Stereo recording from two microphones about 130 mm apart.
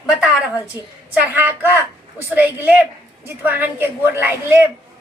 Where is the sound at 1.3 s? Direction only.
15° right (ahead or behind).